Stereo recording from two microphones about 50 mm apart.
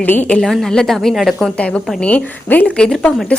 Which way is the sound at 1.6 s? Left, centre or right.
Left.